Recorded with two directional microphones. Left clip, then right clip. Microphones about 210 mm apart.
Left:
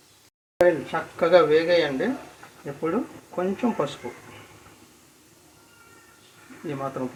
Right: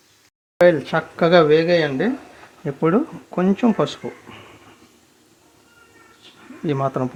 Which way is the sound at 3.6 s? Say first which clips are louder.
Right 8 dB; 50° right (ahead or behind).